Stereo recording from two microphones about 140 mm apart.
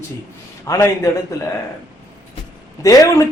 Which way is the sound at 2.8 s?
25° left (ahead or behind).